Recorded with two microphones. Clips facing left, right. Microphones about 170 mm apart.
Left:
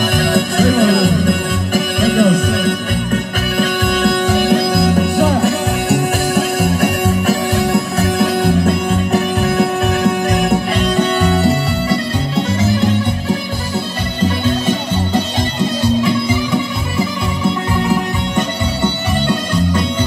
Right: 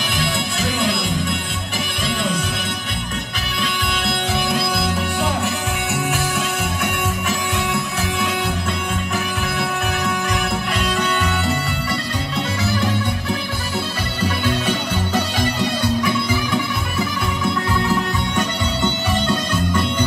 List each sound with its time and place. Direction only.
0.2 s music: 50° left (ahead or behind); by 12.0 s 35° left (ahead or behind)